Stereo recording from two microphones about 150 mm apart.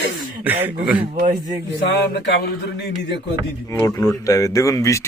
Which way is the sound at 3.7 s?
20° left (ahead or behind).